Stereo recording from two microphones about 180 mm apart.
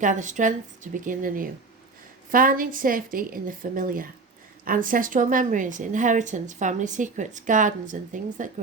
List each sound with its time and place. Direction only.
0.0 s speech: 45° right (ahead or behind)